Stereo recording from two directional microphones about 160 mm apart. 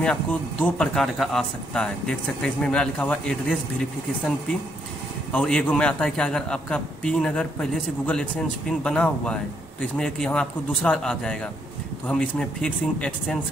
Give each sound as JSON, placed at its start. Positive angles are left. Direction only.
{"t": 0.0, "sound": "a man's voice", "side_deg": 5}
{"t": 5.3, "sound": "a man's voice", "side_deg": 5}